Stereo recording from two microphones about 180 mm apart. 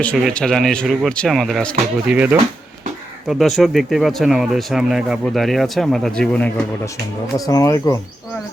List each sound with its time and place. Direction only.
0.0 s speech: 5° left (ahead or behind)
7.3 s speech: 20° left (ahead or behind)